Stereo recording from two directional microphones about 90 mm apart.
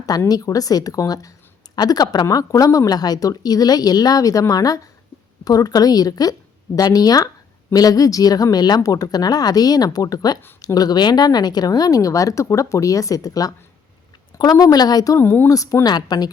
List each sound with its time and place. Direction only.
0.3 s speech: 45° left (ahead or behind)
15.2 s speech: 25° left (ahead or behind)
15.4 s speech: 40° left (ahead or behind)